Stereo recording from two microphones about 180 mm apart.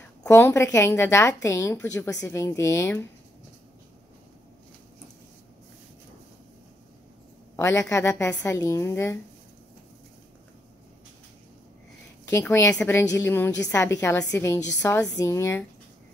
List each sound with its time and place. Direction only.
0.2 s a woman's voice: 15° left (ahead or behind)
7.5 s a woman's voice: 15° left (ahead or behind)
12.3 s a woman's voice: 15° left (ahead or behind)